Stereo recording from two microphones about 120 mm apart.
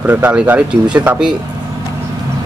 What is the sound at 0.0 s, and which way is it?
A man's voice, 15° right (ahead or behind).